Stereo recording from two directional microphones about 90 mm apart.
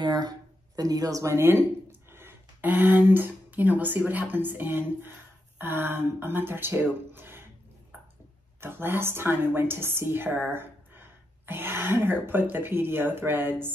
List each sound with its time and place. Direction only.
0.0 s a woman's voice: 50° right (ahead or behind); by 7.4 s 25° right (ahead or behind)
8.5 s a woman's voice: 25° right (ahead or behind)